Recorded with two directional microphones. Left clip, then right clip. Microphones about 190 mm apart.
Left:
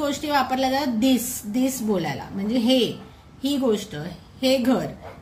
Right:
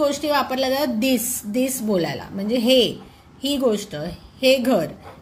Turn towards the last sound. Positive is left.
turn(degrees=-20)  # may be behind; listen again after turning